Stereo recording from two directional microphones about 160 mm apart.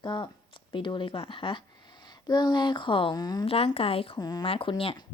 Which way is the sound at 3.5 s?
40° left (ahead or behind).